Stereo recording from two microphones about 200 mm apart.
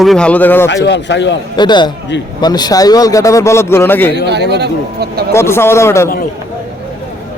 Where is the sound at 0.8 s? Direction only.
60° left (ahead or behind).